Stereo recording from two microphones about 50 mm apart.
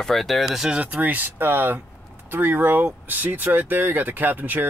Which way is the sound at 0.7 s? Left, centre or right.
Right.